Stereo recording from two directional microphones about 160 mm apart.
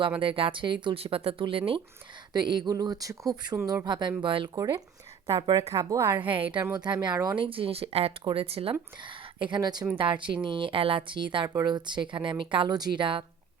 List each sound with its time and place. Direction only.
0.2 s speech: 35° right (ahead or behind)
6.1 s speech: 35° right (ahead or behind)